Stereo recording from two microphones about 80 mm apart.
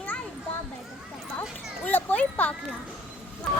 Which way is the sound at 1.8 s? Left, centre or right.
Left.